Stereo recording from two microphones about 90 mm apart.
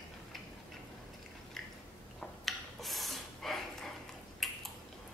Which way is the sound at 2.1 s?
Centre (ahead or behind).